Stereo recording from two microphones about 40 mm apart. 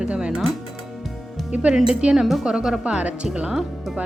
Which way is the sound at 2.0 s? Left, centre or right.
Right.